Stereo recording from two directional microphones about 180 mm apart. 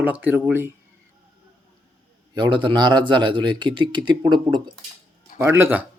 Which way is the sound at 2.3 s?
25° right (ahead or behind).